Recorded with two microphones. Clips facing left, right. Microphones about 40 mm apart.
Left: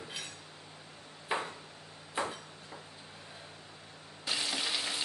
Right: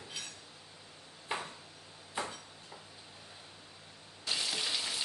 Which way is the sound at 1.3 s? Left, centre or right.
Left.